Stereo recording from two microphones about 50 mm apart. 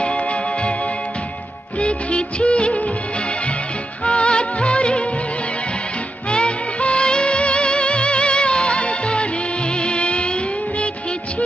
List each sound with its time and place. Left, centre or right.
0.0 s music: left
1.8 s music of bollywood: left
4.0 s music of bollywood: left
6.3 s music: left